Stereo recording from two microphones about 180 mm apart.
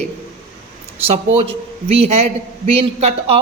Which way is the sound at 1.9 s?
35° right (ahead or behind).